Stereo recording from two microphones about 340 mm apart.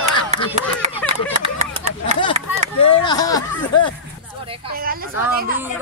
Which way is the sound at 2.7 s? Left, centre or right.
Centre.